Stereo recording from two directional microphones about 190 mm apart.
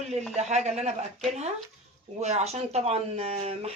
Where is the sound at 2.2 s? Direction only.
35° right (ahead or behind).